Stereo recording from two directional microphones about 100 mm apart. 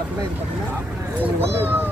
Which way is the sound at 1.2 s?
20° right (ahead or behind).